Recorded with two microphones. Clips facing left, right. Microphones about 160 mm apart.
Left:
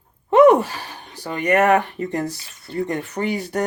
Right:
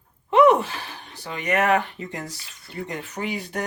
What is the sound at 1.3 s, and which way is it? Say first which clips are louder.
Speech: left 5 dB; 55° left (ahead or behind).